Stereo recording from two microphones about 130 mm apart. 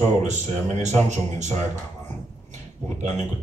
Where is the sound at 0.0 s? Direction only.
65° right (ahead or behind).